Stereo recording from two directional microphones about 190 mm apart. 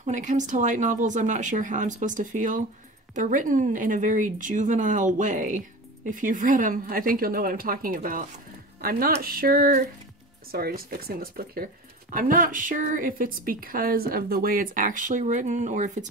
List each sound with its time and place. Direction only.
0.0 s speech: 40° right (ahead or behind)